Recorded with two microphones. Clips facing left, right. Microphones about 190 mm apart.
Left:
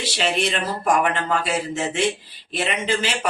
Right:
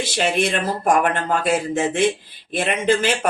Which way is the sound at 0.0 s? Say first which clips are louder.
Right 3 dB; 50° right (ahead or behind).